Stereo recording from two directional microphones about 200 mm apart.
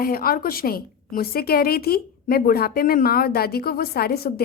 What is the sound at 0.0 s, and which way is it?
A woman's voice, 45° left (ahead or behind).